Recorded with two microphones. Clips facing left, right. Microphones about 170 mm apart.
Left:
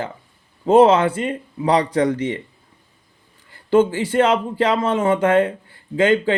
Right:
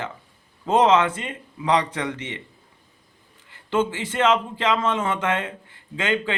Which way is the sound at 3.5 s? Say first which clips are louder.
Left 8 dB; 35° left (ahead or behind).